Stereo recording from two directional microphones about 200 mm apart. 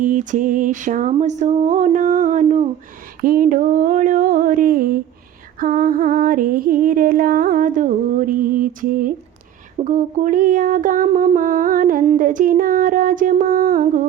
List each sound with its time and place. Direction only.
0.0 s music: 40° right (ahead or behind)
3.2 s female singing: 45° right (ahead or behind)